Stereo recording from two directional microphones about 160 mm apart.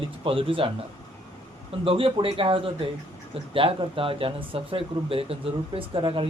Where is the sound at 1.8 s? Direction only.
35° right (ahead or behind).